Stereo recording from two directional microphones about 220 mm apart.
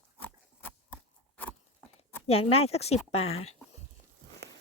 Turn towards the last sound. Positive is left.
turn(degrees=30)  # may be behind; listen again after turning